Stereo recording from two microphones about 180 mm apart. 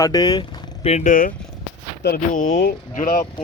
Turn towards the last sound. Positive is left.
turn(degrees=50)  # may be behind; listen again after turning